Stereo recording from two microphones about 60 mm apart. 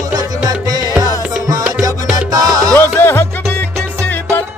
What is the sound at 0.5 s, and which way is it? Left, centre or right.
Music, right.